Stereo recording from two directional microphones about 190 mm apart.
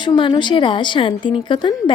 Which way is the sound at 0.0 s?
25° left (ahead or behind).